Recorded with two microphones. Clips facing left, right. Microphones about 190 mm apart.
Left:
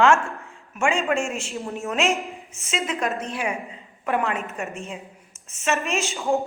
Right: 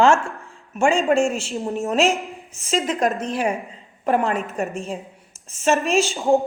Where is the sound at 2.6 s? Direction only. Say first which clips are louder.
Right 5 dB; 35° right (ahead or behind).